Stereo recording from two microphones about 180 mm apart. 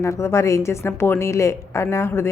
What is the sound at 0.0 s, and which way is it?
A woman's voice, 15° left (ahead or behind).